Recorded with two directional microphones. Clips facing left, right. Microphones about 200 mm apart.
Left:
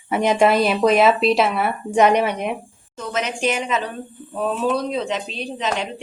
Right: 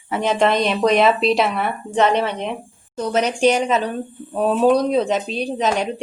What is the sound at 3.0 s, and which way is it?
Speech, 40° right (ahead or behind).